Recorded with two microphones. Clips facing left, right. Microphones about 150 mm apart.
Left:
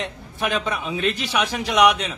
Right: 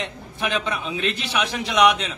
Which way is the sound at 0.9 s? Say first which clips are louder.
Left 3 dB; 40° left (ahead or behind).